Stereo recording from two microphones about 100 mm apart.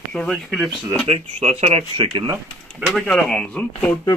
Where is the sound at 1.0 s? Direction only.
90° right.